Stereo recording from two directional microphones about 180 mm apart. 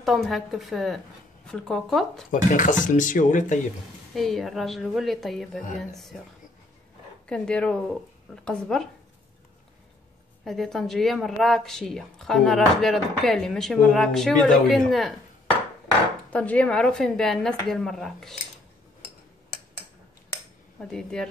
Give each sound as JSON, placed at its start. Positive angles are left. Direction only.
{"t": 0.0, "sound": "a woman's voice", "side_deg": 0}
{"t": 2.3, "sound": "speech", "side_deg": 45}
{"t": 4.1, "sound": "a woman's voice", "side_deg": 0}
{"t": 7.2, "sound": "a woman's voice", "side_deg": 5}
{"t": 10.4, "sound": "a woman's voice", "side_deg": 0}
{"t": 16.3, "sound": "a woman's voice", "side_deg": 5}
{"t": 20.9, "sound": "a woman's voice", "side_deg": 5}